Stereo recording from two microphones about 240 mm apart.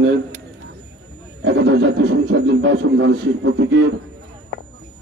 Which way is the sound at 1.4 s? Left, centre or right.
Right.